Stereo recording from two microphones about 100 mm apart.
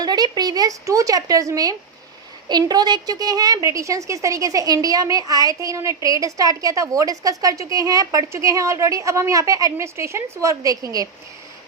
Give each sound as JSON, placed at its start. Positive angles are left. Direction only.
{"t": 0.0, "sound": "a woman's voice", "side_deg": -40}